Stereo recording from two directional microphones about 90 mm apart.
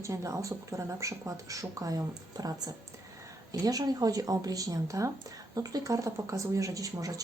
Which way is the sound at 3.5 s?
45° right (ahead or behind).